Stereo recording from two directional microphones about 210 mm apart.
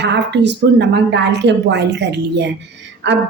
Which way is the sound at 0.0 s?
55° right (ahead or behind).